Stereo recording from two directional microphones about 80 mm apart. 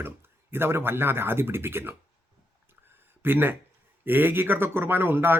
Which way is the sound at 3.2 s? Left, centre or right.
Right.